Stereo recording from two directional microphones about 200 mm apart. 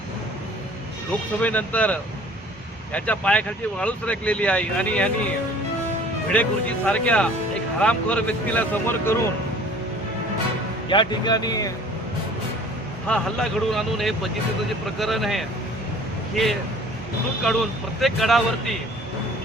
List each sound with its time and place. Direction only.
1.4 s speech: 5° left (ahead or behind)
6.3 s speech: 5° left (ahead or behind)
10.8 s speech: 20° left (ahead or behind)
13.1 s speech: 5° left (ahead or behind)